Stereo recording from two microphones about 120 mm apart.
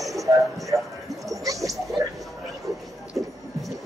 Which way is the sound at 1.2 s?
30° right (ahead or behind).